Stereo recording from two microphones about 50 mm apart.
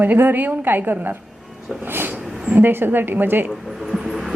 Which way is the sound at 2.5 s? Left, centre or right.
Right.